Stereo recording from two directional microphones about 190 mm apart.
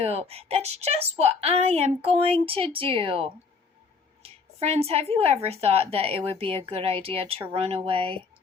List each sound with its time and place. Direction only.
0.0 s a woman's voice: 30° right (ahead or behind)